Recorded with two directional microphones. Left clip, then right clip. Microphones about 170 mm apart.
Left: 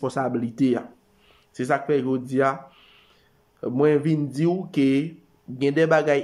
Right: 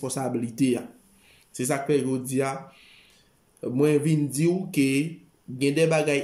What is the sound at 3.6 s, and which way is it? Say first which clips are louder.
Speech: left 2 dB; 20° right (ahead or behind).